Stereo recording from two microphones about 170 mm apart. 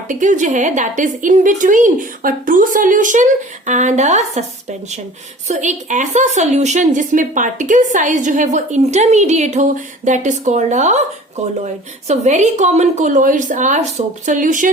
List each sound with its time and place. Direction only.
0.1 s a woman's voice: 45° right (ahead or behind)
5.5 s a woman's voice: 45° right (ahead or behind)